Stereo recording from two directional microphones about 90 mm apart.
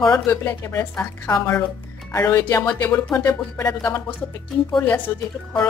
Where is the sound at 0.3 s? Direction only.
25° left (ahead or behind).